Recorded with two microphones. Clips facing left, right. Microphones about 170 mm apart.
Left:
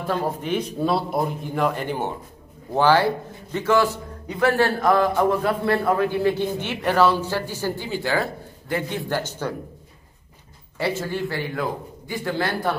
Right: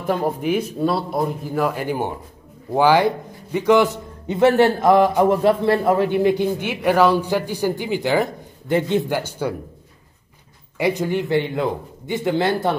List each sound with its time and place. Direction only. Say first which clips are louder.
0.0 s a man's voice: right 4 dB; 15° right (ahead or behind)
9.2 s a man's voice: right 4 dB; 10° right (ahead or behind)
10.8 s a man's voice: right 5 dB; 15° right (ahead or behind)